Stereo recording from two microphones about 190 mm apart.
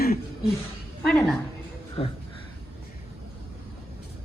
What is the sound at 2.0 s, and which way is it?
Speech, 30° left (ahead or behind).